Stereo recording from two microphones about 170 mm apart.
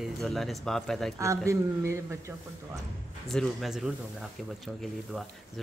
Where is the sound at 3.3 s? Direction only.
Centre (ahead or behind).